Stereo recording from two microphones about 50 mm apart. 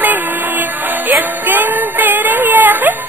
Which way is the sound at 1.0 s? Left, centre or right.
Right.